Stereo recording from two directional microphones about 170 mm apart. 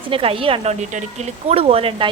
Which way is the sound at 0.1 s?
35° right (ahead or behind).